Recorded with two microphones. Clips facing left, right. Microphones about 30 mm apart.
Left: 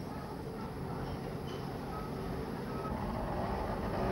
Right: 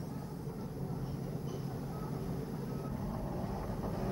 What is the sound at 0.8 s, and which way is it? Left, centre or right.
Vehicle, left.